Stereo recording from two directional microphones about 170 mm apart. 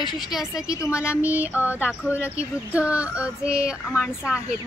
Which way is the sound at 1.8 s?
15° left (ahead or behind).